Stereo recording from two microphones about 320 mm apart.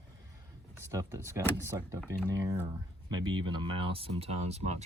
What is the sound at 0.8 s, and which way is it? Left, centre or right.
Speech, centre.